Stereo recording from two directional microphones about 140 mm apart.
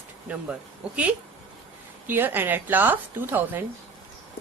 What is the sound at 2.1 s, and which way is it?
Speech, 15° right (ahead or behind).